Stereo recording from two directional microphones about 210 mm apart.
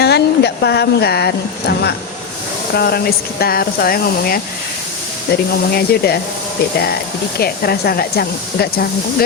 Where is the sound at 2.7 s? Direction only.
50° left (ahead or behind).